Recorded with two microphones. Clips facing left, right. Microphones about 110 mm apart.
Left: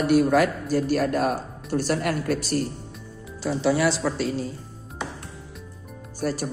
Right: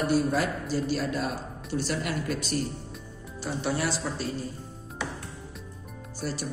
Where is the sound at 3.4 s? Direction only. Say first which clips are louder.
Left 7 dB; 90° left.